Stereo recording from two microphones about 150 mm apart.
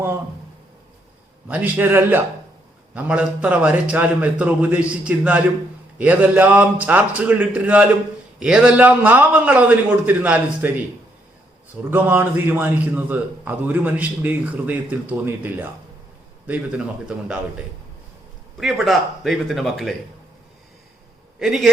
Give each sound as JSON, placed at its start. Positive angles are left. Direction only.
{"t": 1.5, "sound": "a man's voice", "side_deg": -10}
{"t": 11.9, "sound": "a man's voice", "side_deg": -10}
{"t": 18.5, "sound": "a man's voice", "side_deg": 0}
{"t": 21.3, "sound": "a man's voice", "side_deg": 0}